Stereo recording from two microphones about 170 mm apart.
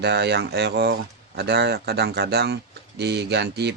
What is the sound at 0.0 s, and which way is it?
Speech, 75° right (ahead or behind).